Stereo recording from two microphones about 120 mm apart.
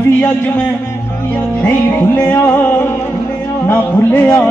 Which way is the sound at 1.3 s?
15° left (ahead or behind).